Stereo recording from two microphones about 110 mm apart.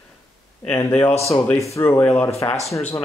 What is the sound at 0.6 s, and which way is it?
Speech, 15° left (ahead or behind).